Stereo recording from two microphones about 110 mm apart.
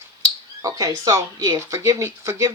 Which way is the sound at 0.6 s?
35° right (ahead or behind).